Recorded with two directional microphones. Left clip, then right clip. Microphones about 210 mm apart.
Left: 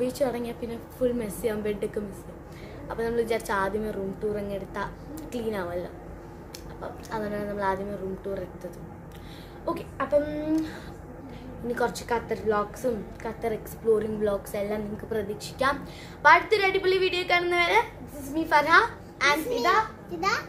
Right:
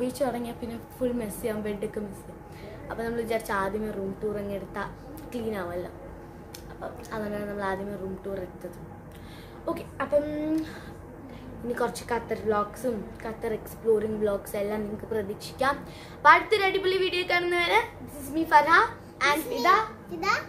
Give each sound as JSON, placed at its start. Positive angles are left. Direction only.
{"t": 0.0, "sound": "a woman's voice", "side_deg": 10}
{"t": 2.9, "sound": "a woman's voice", "side_deg": 10}
{"t": 9.7, "sound": "a woman's voice", "side_deg": 10}
{"t": 20.1, "sound": "a child's voice", "side_deg": -15}